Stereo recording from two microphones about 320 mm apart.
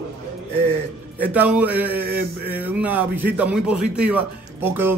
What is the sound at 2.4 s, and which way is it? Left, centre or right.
Speech, centre.